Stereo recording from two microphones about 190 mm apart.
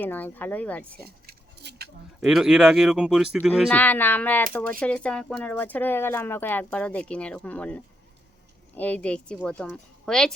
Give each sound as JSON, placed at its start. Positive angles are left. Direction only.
{"t": 0.0, "sound": "speech", "side_deg": 10}
{"t": 1.0, "sound": "a sound", "side_deg": -55}
{"t": 2.2, "sound": "a woman's voice", "side_deg": -5}
{"t": 3.7, "sound": "a woman's voice", "side_deg": 10}